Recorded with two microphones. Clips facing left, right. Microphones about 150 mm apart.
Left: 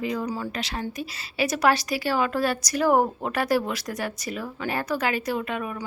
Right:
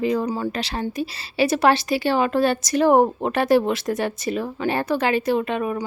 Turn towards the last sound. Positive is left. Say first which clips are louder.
# right 6 dB
turn(degrees=-30)  # may be behind; listen again after turning